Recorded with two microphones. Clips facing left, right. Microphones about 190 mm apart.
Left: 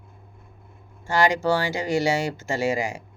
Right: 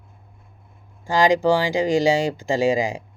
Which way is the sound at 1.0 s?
15° right (ahead or behind).